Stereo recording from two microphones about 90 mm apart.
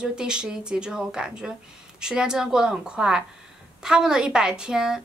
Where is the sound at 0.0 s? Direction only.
10° right (ahead or behind).